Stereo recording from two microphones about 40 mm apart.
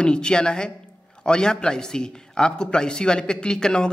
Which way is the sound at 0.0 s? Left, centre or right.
Left.